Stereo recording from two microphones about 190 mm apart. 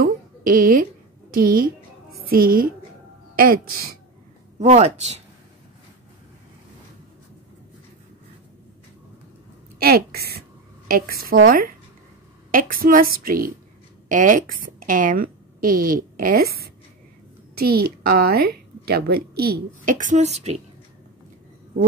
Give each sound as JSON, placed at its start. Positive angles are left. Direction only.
{"t": 0.0, "sound": "a sound", "side_deg": -45}
{"t": 1.3, "sound": "a woman's voice", "side_deg": -50}
{"t": 4.6, "sound": "speech", "side_deg": -35}
{"t": 9.8, "sound": "a woman's voice", "side_deg": -55}